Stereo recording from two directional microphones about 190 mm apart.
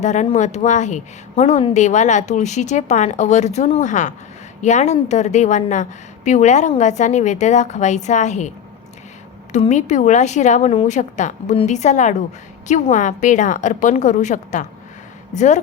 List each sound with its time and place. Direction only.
0.0 s a woman's voice: 40° left (ahead or behind)